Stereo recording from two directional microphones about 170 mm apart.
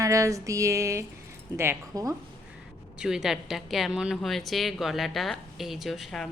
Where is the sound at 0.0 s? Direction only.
20° right (ahead or behind).